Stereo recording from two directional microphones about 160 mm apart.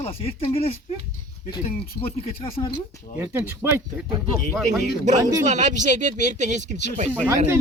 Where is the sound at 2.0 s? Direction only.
40° left (ahead or behind).